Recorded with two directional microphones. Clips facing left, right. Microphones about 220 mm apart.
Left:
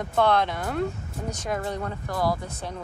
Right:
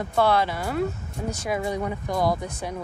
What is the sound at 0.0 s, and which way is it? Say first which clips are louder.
Speech: right 1 dB; 5° right (ahead or behind).